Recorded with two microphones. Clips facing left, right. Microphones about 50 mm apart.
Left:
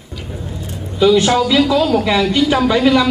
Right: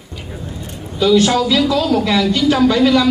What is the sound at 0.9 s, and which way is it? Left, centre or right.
Speech, centre.